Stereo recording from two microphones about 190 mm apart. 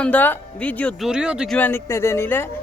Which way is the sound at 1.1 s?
5° right (ahead or behind).